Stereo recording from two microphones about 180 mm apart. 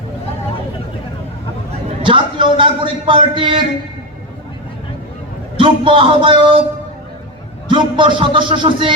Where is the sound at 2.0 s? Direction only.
30° right (ahead or behind).